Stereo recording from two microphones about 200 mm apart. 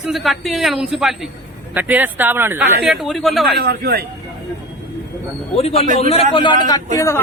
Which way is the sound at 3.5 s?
55° right (ahead or behind).